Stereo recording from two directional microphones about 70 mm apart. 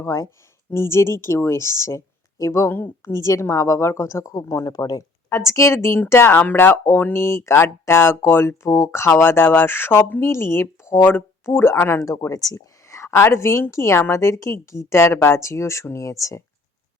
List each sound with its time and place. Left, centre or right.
0.0 s a woman's voice: left
2.6 s speech: left
3.1 s a woman's voice: left
4.7 s speech: left
5.3 s a woman's voice: left
12.0 s a woman's voice: left
12.9 s a woman's voice: left